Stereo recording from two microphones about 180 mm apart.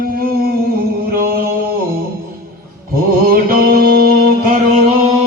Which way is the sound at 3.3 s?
55° right (ahead or behind).